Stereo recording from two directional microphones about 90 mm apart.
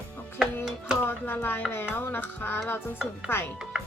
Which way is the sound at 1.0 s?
20° left (ahead or behind).